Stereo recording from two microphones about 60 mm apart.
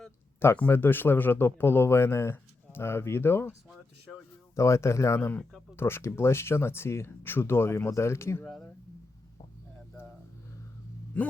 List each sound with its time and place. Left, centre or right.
0.5 s speech: left
4.5 s speech: left
8.4 s speech: centre